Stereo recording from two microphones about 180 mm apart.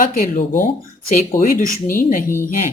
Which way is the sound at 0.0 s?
45° left (ahead or behind).